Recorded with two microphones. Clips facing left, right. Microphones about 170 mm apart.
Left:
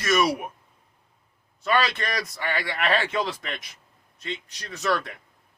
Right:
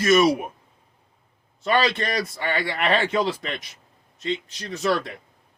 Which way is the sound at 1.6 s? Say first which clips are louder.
Right 3 dB; 25° right (ahead or behind).